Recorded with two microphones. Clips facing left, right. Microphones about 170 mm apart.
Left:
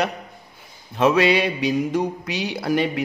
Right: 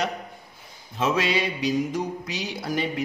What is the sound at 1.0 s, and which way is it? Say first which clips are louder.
Mantra: left 7 dB; 65° left (ahead or behind).